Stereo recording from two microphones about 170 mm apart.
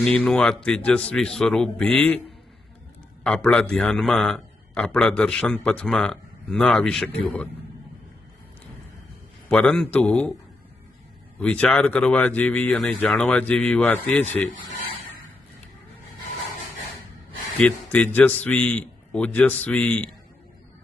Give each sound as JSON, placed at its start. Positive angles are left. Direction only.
{"t": 0.0, "sound": "a man's voice", "side_deg": 5}
{"t": 3.2, "sound": "a man's voice", "side_deg": 5}
{"t": 9.5, "sound": "speech", "side_deg": 5}
{"t": 11.3, "sound": "speech", "side_deg": 10}
{"t": 17.6, "sound": "speech", "side_deg": 10}